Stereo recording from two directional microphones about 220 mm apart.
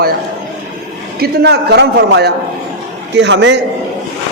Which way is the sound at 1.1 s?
50° right (ahead or behind).